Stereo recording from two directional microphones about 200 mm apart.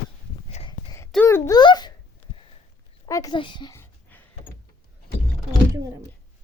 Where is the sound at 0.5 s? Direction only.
25° left (ahead or behind).